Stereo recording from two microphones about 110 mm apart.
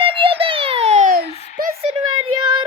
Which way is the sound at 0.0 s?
55° right (ahead or behind).